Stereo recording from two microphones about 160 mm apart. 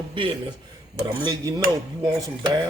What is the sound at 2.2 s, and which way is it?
Speech, 25° right (ahead or behind).